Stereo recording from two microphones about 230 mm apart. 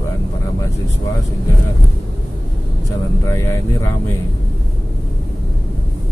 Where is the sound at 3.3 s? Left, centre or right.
Centre.